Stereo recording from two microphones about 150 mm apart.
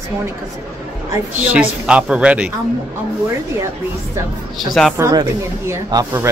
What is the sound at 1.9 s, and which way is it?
Speech, 5° right (ahead or behind).